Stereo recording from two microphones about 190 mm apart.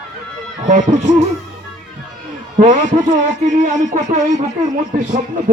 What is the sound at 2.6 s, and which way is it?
Speech, 40° right (ahead or behind).